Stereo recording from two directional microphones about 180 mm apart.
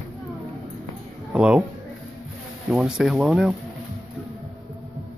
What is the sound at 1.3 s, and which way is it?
Speech, 5° right (ahead or behind).